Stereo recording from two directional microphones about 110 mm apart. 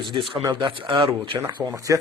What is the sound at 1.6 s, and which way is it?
Speech, 30° right (ahead or behind).